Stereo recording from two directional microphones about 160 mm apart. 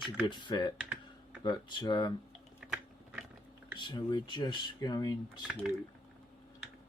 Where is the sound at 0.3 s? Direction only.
30° left (ahead or behind).